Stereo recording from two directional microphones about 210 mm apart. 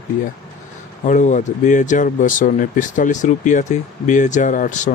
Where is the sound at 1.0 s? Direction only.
35° left (ahead or behind).